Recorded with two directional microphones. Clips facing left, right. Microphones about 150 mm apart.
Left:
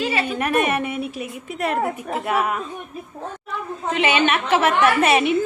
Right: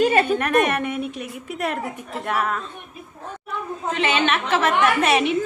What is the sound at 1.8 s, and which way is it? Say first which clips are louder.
Speech: left 6 dB; 65° left (ahead or behind).